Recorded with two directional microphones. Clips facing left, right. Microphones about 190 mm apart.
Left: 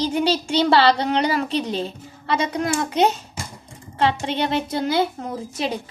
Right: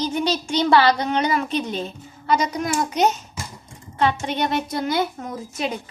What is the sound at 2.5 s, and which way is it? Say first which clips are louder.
Speech: left 1 dB; 60° left (ahead or behind).